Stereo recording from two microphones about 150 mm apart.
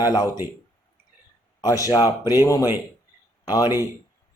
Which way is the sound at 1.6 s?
25° left (ahead or behind).